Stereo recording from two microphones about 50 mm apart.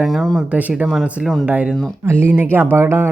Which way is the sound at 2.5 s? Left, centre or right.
Right.